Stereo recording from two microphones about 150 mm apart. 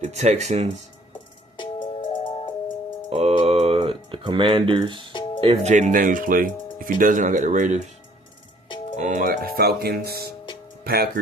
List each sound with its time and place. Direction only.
0.0 s speech: 50° right (ahead or behind)
1.5 s music: 35° left (ahead or behind)
3.1 s a sound: 40° right (ahead or behind)
5.4 s speech: 40° right (ahead or behind)
5.7 s speech: 60° right (ahead or behind)
9.0 s speech: 55° right (ahead or behind); by 11.1 s 90° right